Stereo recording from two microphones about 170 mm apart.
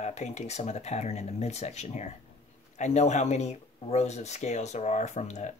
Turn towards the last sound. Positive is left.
turn(degrees=40)  # may be behind; listen again after turning